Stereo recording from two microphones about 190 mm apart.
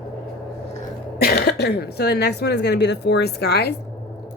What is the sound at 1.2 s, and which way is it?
Speech, 55° left (ahead or behind).